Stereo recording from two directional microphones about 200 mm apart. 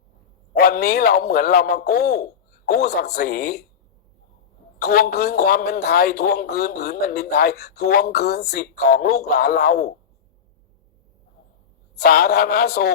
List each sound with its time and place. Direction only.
0.5 s a man's voice: 50° left (ahead or behind)
4.8 s speech: 50° left (ahead or behind)
11.9 s speech: 50° left (ahead or behind)